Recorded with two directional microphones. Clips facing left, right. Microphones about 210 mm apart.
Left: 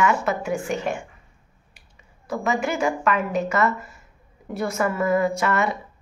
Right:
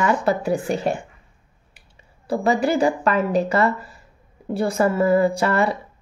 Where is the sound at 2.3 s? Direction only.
35° right (ahead or behind).